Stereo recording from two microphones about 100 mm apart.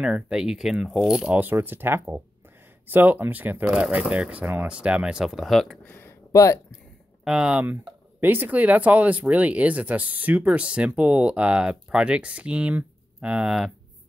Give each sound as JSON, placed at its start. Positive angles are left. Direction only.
{"t": 0.0, "sound": "speech", "side_deg": -10}
{"t": 1.3, "sound": "speech", "side_deg": -20}
{"t": 5.9, "sound": "a sound", "side_deg": 20}
{"t": 6.3, "sound": "speech", "side_deg": 35}
{"t": 7.2, "sound": "speech", "side_deg": -10}